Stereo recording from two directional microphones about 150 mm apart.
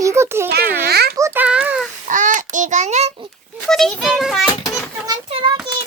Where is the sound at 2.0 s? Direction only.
60° right (ahead or behind).